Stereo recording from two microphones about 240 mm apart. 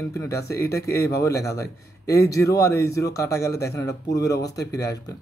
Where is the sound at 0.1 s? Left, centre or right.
Centre.